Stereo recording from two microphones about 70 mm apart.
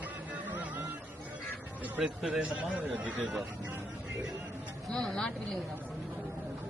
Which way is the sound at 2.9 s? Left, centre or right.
Right.